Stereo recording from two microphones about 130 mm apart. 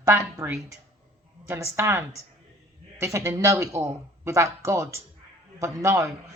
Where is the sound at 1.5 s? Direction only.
20° right (ahead or behind).